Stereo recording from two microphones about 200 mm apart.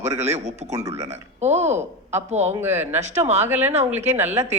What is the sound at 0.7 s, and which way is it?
Speech, 15° right (ahead or behind).